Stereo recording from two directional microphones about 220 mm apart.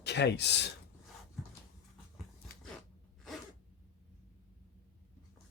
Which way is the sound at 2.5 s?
45° left (ahead or behind).